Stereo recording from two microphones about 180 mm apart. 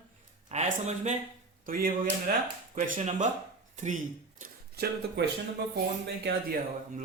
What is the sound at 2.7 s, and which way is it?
Speech, 40° right (ahead or behind).